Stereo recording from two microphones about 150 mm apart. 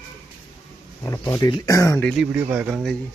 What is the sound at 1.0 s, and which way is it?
Speech, 20° left (ahead or behind).